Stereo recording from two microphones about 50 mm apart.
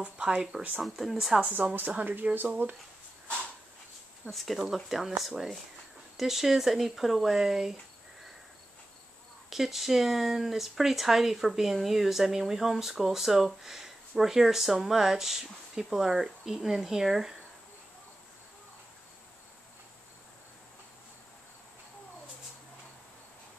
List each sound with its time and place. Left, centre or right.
0.0 s speech: right
0.7 s speech: centre
2.3 s speech: right
4.3 s speech: centre
9.5 s speech: centre